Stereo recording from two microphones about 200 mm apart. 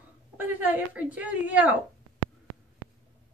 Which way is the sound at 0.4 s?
10° right (ahead or behind).